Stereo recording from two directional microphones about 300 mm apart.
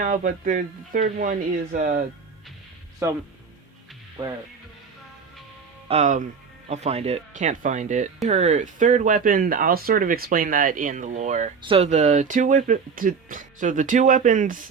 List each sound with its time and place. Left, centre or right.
0.0 s speech: right
3.0 s speech: centre
4.2 s speech: centre
5.9 s speech: right